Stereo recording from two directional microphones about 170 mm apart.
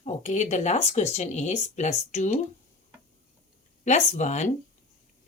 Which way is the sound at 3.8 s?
45° left (ahead or behind).